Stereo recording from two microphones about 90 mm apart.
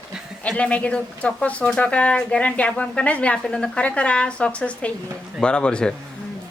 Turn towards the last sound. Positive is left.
turn(degrees=10)  # may be behind; listen again after turning